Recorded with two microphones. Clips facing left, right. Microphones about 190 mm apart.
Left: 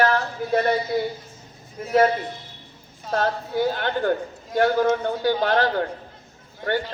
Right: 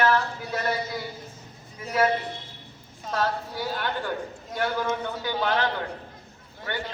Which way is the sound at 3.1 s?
50° left (ahead or behind).